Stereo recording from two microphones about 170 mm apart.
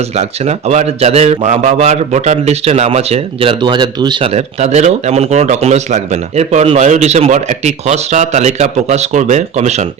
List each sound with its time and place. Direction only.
0.2 s speech: 40° right (ahead or behind)
3.6 s speech: 25° right (ahead or behind)
4.4 s speech: 40° right (ahead or behind)